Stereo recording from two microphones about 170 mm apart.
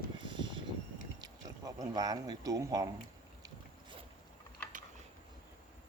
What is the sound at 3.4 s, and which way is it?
Boat, 30° right (ahead or behind).